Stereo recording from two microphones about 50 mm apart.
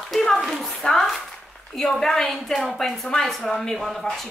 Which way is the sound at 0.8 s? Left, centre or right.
Left.